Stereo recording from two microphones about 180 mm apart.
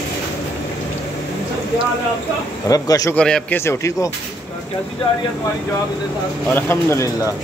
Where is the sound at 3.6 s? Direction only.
15° left (ahead or behind).